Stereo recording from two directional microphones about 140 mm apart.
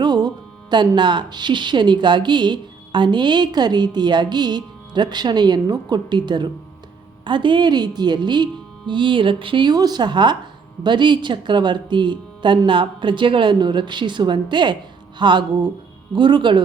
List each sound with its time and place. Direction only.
0.0 s speech: 30° right (ahead or behind)